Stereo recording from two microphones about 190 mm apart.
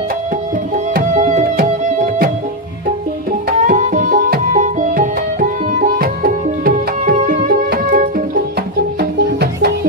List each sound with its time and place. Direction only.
0.9 s music: 40° right (ahead or behind)
3.4 s music: 45° right (ahead or behind)